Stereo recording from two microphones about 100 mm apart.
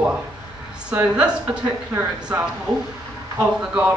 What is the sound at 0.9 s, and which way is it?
A woman's voice, 10° right (ahead or behind).